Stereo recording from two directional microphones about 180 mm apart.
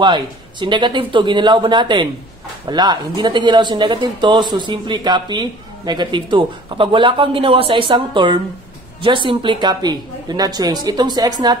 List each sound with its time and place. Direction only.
0.0 s speech: 25° right (ahead or behind)